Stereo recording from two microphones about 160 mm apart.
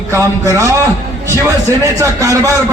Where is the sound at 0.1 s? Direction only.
20° right (ahead or behind).